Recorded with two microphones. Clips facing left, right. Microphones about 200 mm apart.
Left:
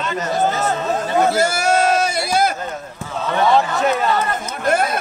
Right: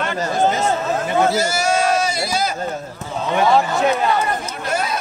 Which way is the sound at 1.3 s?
60° left (ahead or behind).